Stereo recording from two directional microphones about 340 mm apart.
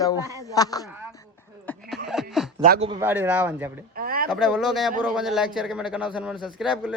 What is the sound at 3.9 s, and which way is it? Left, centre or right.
Speech, right.